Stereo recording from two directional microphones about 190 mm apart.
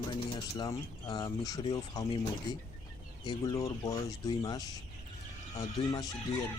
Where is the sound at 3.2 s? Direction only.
25° left (ahead or behind).